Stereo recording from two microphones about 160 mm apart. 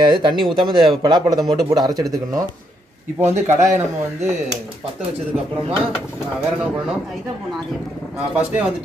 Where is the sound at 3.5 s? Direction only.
50° right (ahead or behind).